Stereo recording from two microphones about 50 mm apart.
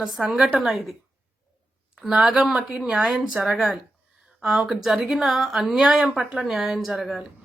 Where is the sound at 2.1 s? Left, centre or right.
Centre.